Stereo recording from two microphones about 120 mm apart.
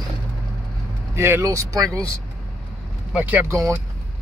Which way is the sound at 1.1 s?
20° right (ahead or behind).